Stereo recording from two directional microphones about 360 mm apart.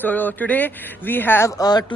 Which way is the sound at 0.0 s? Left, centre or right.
Centre.